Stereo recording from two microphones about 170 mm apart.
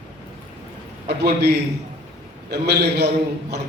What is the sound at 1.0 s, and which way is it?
Speech, 75° right (ahead or behind).